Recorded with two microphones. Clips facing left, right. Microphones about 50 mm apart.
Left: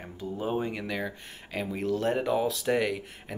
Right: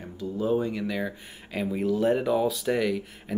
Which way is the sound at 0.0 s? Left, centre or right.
Left.